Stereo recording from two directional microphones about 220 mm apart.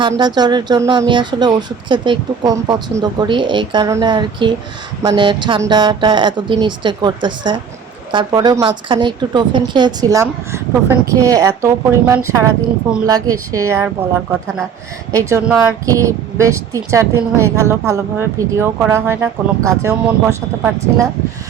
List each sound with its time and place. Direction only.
0.0 s speech: 20° right (ahead or behind)